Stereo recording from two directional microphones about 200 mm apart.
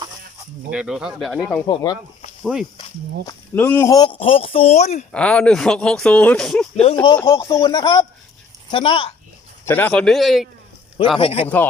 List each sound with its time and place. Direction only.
0.7 s speech: 5° right (ahead or behind)
1.6 s speech: 20° left (ahead or behind)
2.4 s speech: centre (ahead or behind)
3.2 s speech: 10° left (ahead or behind)
4.2 s speech: 30° left (ahead or behind)
5.1 s speech: 5° left (ahead or behind)
7.2 s speech: 15° left (ahead or behind)
9.6 s speech: 10° left (ahead or behind)
11.2 s speech: 30° left (ahead or behind)
11.4 s speech: 10° left (ahead or behind)